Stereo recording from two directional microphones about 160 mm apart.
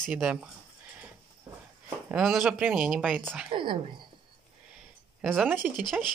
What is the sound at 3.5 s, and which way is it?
Speech, 30° right (ahead or behind).